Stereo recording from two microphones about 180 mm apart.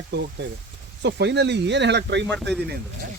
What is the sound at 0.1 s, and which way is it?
Speech, 75° right (ahead or behind).